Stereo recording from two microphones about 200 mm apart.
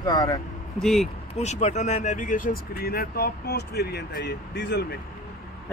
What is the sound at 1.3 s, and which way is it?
Speech, 35° left (ahead or behind).